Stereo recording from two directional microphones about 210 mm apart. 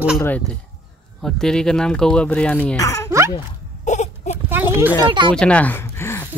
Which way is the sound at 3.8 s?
35° left (ahead or behind).